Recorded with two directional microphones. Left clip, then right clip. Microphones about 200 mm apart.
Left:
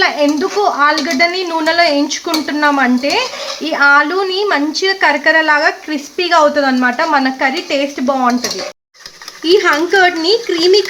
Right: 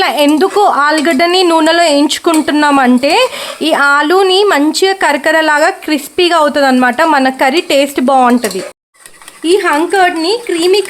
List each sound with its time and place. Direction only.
0.0 s speech: 45° right (ahead or behind)
9.4 s speech: 25° right (ahead or behind)